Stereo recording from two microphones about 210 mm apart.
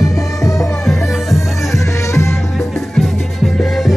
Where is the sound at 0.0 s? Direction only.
15° left (ahead or behind).